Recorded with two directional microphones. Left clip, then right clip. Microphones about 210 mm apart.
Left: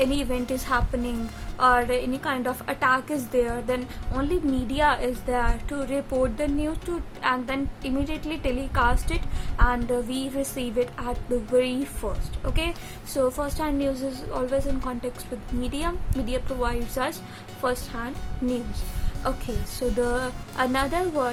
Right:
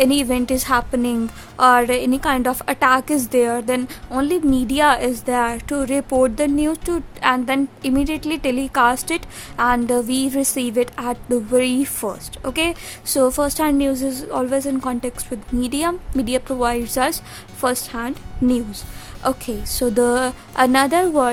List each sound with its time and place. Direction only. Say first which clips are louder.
0.0 s a woman's voice: right 8 dB; 50° right (ahead or behind)